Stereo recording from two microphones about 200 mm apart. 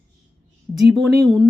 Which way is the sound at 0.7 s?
Centre (ahead or behind).